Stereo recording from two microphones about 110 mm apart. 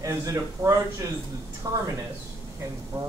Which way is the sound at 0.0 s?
30° right (ahead or behind).